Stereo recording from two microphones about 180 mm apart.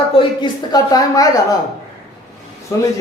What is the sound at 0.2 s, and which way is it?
Speech, 25° left (ahead or behind).